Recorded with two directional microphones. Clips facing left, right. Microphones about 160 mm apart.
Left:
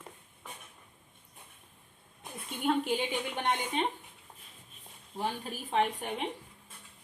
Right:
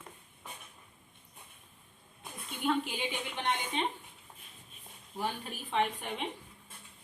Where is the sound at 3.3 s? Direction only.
45° left (ahead or behind).